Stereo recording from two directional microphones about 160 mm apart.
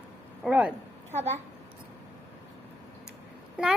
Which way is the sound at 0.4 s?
5° right (ahead or behind).